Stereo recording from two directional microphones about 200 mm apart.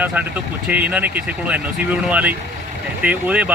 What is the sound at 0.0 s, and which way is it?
Speech, 10° right (ahead or behind).